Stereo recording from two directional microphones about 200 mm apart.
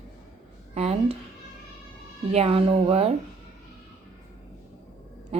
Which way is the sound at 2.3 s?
30° right (ahead or behind).